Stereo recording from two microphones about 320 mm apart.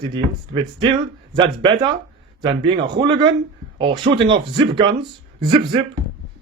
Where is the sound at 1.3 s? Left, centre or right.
Centre.